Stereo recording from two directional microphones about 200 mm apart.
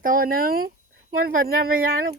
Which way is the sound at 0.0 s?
45° right (ahead or behind).